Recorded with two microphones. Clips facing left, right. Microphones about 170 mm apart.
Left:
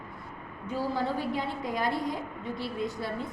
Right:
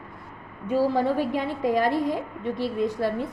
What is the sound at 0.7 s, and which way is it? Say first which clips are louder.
Speech: right 8 dB; 70° right (ahead or behind).